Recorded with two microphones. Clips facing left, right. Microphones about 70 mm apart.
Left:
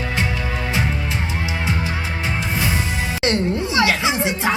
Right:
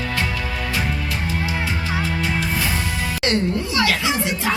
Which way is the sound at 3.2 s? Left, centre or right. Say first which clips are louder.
Left 1 dB; left.